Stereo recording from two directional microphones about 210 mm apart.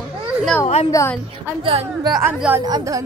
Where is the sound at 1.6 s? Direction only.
25° right (ahead or behind).